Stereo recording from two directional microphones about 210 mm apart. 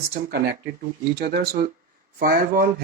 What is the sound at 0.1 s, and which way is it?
Speech, 50° right (ahead or behind).